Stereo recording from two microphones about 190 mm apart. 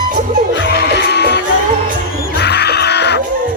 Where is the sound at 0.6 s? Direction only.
60° left (ahead or behind).